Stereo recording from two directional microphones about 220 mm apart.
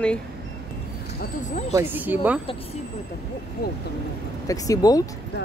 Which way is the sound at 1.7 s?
10° right (ahead or behind).